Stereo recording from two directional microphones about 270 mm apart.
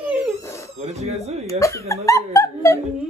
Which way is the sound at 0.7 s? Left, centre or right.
Right.